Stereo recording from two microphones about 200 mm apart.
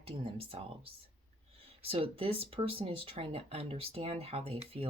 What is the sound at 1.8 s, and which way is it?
Speech, 30° right (ahead or behind).